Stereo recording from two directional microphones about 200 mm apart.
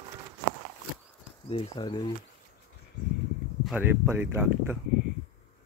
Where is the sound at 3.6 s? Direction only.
10° right (ahead or behind).